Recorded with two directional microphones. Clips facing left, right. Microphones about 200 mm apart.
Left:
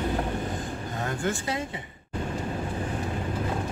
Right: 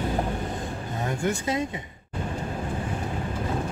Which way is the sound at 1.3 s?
20° right (ahead or behind).